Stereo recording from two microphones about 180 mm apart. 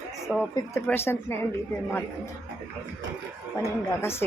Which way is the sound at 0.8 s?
10° left (ahead or behind).